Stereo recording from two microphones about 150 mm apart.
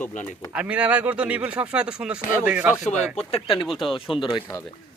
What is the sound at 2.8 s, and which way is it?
Speech, 50° left (ahead or behind).